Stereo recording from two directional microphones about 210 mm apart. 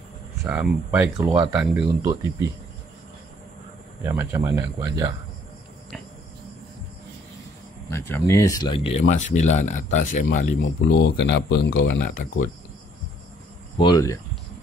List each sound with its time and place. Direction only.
0.4 s speech: 5° right (ahead or behind)
4.0 s speech: 10° right (ahead or behind)
7.9 s speech: 15° left (ahead or behind)
9.0 s speech: 35° left (ahead or behind)
10.6 s speech: 60° left (ahead or behind)
13.7 s speech: 20° left (ahead or behind)